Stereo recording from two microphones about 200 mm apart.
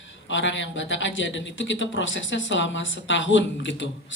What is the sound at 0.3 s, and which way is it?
A man's voice, 65° left (ahead or behind).